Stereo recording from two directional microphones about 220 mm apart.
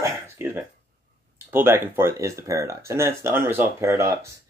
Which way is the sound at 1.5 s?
10° right (ahead or behind).